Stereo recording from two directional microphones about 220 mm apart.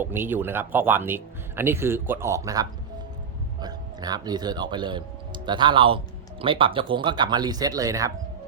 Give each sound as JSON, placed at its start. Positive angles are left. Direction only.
{"t": 0.0, "sound": "speech", "side_deg": -10}